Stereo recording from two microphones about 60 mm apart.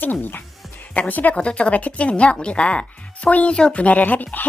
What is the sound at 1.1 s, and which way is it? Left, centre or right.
Speech, left.